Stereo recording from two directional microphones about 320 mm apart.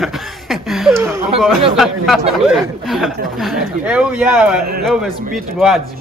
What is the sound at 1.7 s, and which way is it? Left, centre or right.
Speech, centre.